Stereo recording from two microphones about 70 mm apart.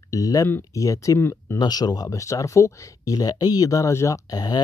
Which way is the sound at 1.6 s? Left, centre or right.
Left.